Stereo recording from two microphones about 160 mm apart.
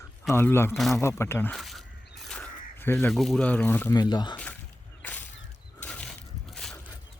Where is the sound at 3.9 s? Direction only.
25° left (ahead or behind).